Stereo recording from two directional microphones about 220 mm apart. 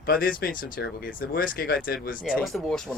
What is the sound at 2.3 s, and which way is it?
Speech, centre (ahead or behind).